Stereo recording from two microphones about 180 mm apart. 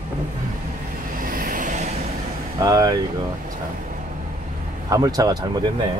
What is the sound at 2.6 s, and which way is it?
Speech, 20° right (ahead or behind).